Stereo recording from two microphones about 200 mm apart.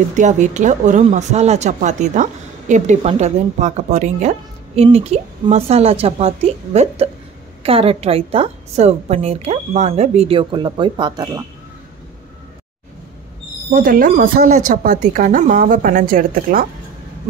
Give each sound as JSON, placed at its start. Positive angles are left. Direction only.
{"t": 0.1, "sound": "a woman's voice", "side_deg": -35}
{"t": 13.7, "sound": "speech", "side_deg": -45}